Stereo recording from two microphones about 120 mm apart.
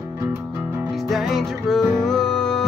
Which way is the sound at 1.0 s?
Centre (ahead or behind).